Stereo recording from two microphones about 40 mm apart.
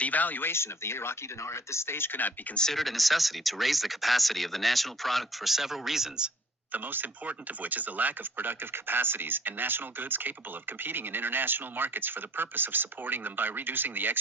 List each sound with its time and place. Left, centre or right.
0.0 s speech: left
0.4 s speech: left
2.1 s speech: left
2.7 s speech: centre
6.7 s speech: right